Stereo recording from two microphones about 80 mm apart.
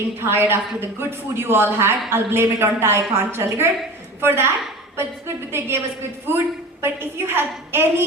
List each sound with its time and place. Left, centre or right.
0.2 s a woman's voice: right
6.8 s speech: right